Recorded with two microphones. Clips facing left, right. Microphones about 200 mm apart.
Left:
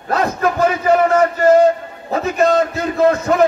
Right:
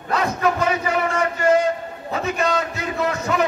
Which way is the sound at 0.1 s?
45° left (ahead or behind).